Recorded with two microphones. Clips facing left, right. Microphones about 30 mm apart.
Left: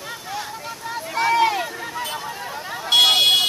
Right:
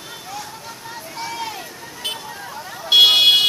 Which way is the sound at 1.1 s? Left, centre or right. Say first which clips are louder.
Left 11 dB; left.